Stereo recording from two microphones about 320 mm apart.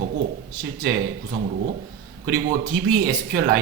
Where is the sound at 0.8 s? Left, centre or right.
Right.